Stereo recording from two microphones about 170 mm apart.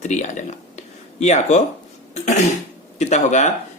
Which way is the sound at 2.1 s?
45° left (ahead or behind).